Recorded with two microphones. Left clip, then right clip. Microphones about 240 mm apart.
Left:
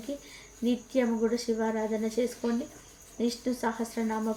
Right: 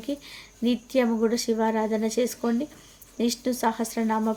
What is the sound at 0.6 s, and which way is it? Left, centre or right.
A woman's voice, right.